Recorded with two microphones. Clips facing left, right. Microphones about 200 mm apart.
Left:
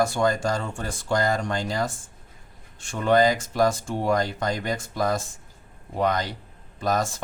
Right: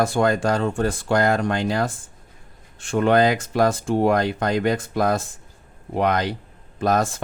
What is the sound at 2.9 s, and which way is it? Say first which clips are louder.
A man's voice: right 3 dB; 60° right (ahead or behind).